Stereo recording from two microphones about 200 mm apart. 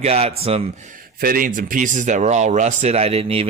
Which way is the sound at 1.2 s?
45° right (ahead or behind).